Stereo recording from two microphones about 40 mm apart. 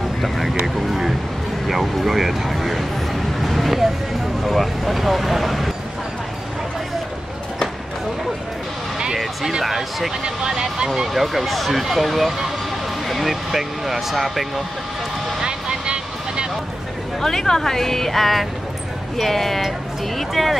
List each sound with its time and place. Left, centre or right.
0.2 s vehicle: centre
1.7 s speech: centre
2.5 s a sound: centre
4.6 s speech: centre
8.9 s music: centre
9.5 s speech: centre
10.2 s speech: centre
11.1 s speech: centre
15.4 s vehicle: right
17.2 s speech: centre